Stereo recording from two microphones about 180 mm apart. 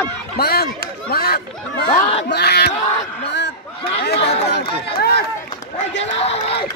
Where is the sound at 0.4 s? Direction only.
60° left (ahead or behind).